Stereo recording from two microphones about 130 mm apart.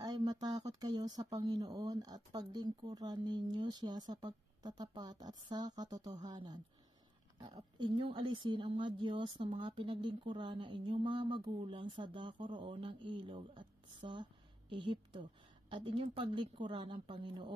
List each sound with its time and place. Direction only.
0.0 s a woman's voice: 30° right (ahead or behind)